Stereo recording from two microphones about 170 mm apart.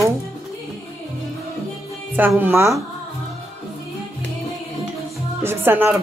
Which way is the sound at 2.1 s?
10° right (ahead or behind).